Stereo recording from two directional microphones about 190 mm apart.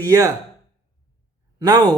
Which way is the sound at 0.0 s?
15° right (ahead or behind).